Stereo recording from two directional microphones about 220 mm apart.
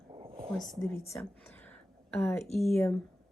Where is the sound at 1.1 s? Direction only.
5° left (ahead or behind).